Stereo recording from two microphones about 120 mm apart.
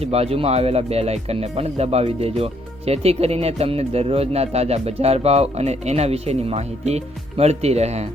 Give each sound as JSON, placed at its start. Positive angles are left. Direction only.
{"t": 0.0, "sound": "speech", "side_deg": -60}